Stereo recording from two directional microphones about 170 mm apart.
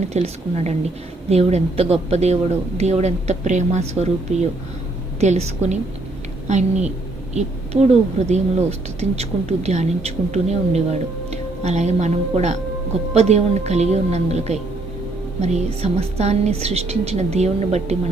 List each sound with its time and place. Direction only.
0.1 s a woman's voice: 40° right (ahead or behind)